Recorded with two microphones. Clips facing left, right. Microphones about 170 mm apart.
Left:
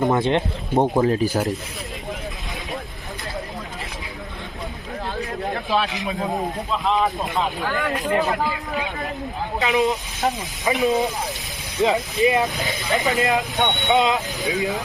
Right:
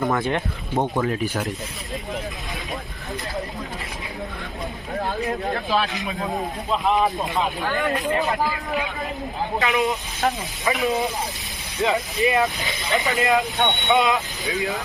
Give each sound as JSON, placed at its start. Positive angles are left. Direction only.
{"t": 0.0, "sound": "speech", "side_deg": 20}
{"t": 5.7, "sound": "speech", "side_deg": 0}
{"t": 6.0, "sound": "speech", "side_deg": 20}
{"t": 6.9, "sound": "speech", "side_deg": 0}
{"t": 9.6, "sound": "speech", "side_deg": 20}
{"t": 11.9, "sound": "speech", "side_deg": 20}
{"t": 12.5, "sound": "speech", "side_deg": 40}
{"t": 13.1, "sound": "speech", "side_deg": 20}